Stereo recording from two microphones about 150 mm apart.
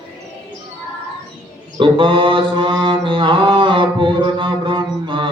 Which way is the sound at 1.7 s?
35° right (ahead or behind).